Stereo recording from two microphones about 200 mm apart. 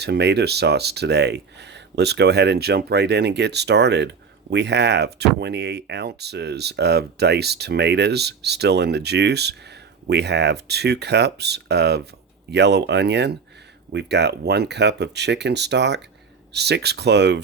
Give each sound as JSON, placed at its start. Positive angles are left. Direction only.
{"t": 0.0, "sound": "speech", "side_deg": -55}